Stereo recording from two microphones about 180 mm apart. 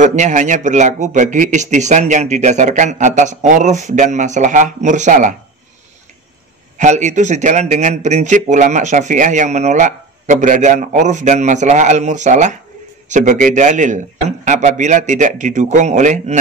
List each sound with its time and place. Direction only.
0.0 s a man's voice: 40° right (ahead or behind)
6.8 s a man's voice: 40° right (ahead or behind)